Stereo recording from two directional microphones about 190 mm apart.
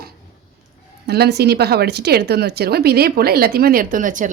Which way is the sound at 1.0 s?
60° right (ahead or behind).